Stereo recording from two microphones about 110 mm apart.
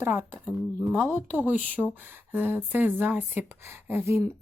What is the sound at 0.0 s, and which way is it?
Speech, 20° right (ahead or behind).